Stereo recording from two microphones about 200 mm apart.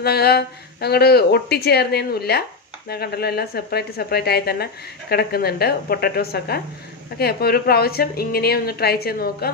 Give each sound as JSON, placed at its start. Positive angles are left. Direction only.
{"t": 0.0, "sound": "a woman's voice", "side_deg": 50}